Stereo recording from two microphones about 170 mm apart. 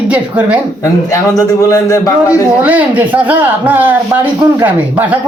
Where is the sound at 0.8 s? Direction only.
20° left (ahead or behind).